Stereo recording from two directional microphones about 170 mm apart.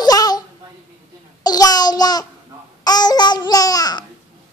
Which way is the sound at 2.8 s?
25° left (ahead or behind).